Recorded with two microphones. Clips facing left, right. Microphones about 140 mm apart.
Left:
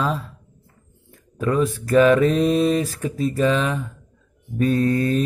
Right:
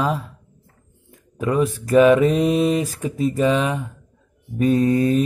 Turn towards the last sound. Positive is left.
turn(degrees=-15)  # may be behind; listen again after turning